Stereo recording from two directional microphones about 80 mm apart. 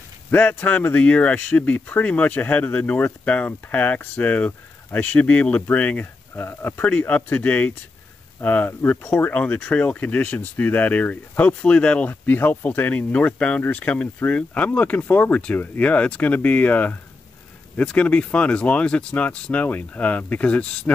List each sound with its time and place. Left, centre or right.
0.3 s speech: left